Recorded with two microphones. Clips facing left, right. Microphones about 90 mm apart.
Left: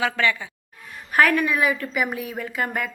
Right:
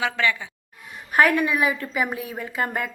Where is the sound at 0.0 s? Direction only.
15° right (ahead or behind).